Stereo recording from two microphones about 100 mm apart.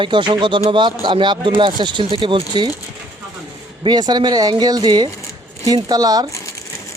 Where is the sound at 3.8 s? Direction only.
45° right (ahead or behind).